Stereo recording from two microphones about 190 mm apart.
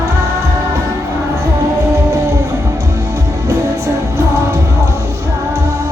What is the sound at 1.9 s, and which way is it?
Music, 15° right (ahead or behind).